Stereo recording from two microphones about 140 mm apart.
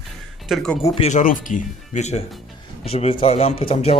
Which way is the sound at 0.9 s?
50° left (ahead or behind).